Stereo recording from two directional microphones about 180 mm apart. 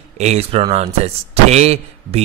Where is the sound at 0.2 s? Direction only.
35° right (ahead or behind).